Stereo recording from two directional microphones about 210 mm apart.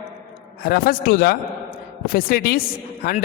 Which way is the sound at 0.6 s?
45° left (ahead or behind).